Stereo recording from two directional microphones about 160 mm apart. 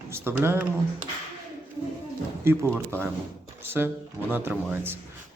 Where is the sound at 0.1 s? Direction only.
15° right (ahead or behind).